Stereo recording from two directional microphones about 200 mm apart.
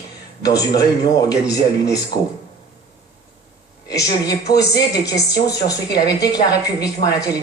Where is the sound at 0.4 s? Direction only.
20° left (ahead or behind).